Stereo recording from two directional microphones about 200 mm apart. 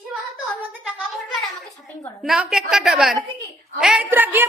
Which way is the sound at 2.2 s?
Centre (ahead or behind).